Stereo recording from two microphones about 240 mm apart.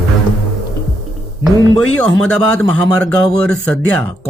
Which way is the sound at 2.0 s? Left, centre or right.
Centre.